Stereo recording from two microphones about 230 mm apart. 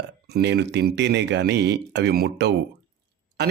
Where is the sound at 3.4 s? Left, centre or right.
Right.